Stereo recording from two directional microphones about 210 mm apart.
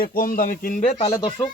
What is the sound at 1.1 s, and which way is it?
Speech, 20° left (ahead or behind).